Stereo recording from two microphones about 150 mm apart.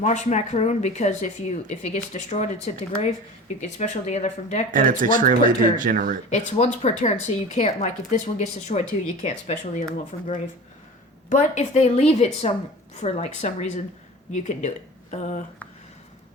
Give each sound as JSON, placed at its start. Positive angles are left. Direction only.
{"t": 0.0, "sound": "speech", "side_deg": 50}
{"t": 4.7, "sound": "speech", "side_deg": -65}
{"t": 6.3, "sound": "speech", "side_deg": 50}
{"t": 15.1, "sound": "a sound", "side_deg": 55}